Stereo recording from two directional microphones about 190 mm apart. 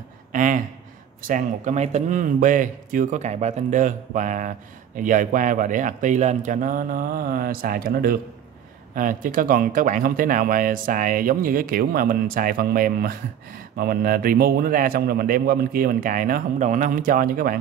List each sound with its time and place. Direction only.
0.3 s speech: 45° right (ahead or behind)